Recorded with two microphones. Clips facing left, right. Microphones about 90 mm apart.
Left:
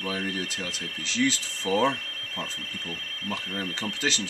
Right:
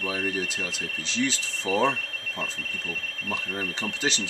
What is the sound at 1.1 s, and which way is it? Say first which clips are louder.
Speech: left 2 dB; 20° right (ahead or behind).